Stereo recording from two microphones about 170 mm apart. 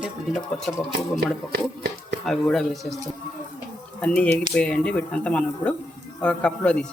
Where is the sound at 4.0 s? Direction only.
5° left (ahead or behind).